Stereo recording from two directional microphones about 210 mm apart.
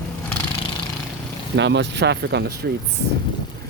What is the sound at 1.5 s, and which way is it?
Speech, 55° right (ahead or behind).